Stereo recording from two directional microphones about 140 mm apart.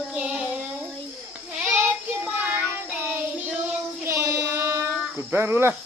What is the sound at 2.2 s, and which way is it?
Child singing, 10° right (ahead or behind).